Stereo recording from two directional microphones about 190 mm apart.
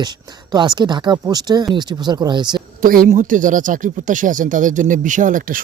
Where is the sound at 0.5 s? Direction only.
25° right (ahead or behind).